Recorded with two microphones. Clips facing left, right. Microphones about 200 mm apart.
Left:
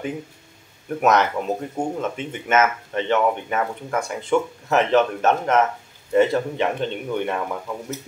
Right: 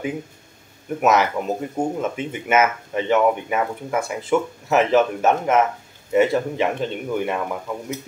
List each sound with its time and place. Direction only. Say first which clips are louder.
0.8 s speech: even; 5° right (ahead or behind)